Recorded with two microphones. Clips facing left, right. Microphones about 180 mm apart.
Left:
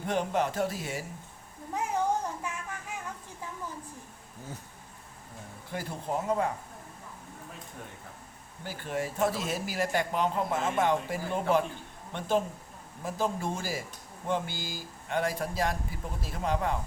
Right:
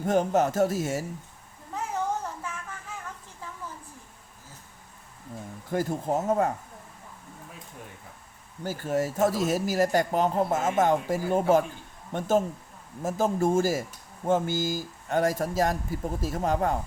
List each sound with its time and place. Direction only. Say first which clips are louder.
0.0 s a man's voice: right 6 dB; 45° right (ahead or behind)
1.7 s a sound: left 1 dB; 15° left (ahead or behind)
5.7 s a man's voice: right 7 dB; 45° right (ahead or behind)
8.6 s a man's voice: right 6 dB; 40° right (ahead or behind)